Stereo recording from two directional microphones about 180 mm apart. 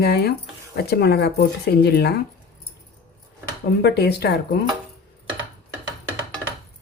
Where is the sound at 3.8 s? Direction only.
65° left (ahead or behind).